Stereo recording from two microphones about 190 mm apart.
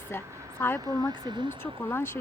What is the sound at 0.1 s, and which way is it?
Speech, 10° left (ahead or behind).